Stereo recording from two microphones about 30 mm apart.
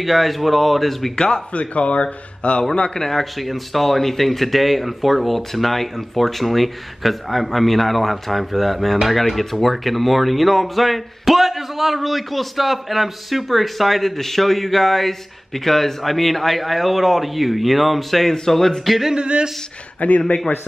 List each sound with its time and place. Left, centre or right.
0.0 s speech: centre
1.1 s speech: left
1.5 s speech: left
2.9 s speech: centre
3.3 s speech: centre
19.1 s speech: right
20.0 s speech: left